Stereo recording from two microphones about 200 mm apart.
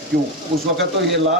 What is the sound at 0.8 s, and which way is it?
Speech, 65° right (ahead or behind).